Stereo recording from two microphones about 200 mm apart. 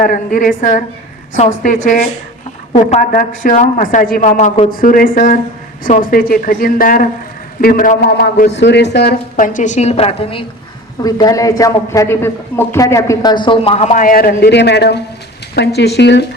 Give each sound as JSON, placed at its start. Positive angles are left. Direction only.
{"t": 0.0, "sound": "a woman's voice", "side_deg": 40}
{"t": 11.0, "sound": "a man's voice", "side_deg": 20}